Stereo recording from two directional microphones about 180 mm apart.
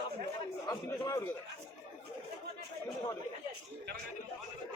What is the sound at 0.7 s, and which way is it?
Speech, 20° left (ahead or behind).